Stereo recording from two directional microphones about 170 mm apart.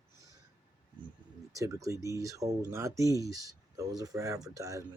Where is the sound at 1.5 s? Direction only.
20° right (ahead or behind).